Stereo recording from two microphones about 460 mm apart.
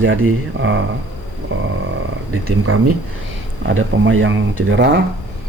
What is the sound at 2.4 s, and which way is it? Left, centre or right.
Speech, right.